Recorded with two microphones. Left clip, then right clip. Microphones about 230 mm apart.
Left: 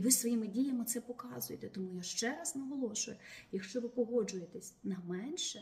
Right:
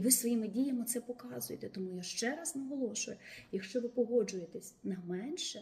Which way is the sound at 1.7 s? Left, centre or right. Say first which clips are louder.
Left 1 dB; left.